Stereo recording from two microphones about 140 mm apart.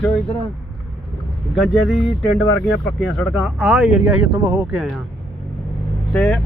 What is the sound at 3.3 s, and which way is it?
Speech, 5° right (ahead or behind).